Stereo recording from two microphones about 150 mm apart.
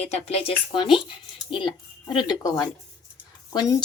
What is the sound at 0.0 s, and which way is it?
Speech, 45° left (ahead or behind).